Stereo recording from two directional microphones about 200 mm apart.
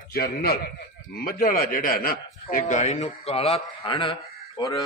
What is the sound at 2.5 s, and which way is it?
A man's voice, 35° left (ahead or behind).